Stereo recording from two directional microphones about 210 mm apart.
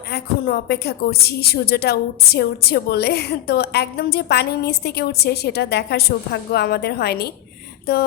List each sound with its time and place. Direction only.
0.1 s a woman's voice: 50° left (ahead or behind)